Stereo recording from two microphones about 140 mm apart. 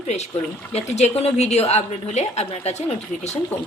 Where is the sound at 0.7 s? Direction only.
50° left (ahead or behind).